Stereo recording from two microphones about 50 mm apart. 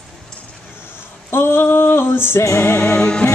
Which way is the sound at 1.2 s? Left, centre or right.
Left.